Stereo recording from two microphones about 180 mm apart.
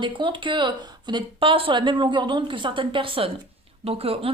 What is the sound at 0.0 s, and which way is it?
A woman's voice, 25° right (ahead or behind).